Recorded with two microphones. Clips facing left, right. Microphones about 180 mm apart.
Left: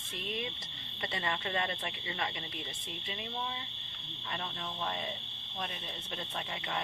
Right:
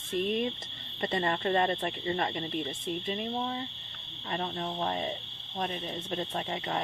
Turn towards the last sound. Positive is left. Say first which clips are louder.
# right 6 dB
turn(degrees=-40)  # may be behind; listen again after turning